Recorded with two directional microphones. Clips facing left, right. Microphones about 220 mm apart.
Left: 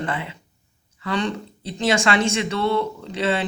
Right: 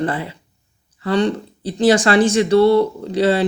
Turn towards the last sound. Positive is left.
turn(degrees=-35)  # may be behind; listen again after turning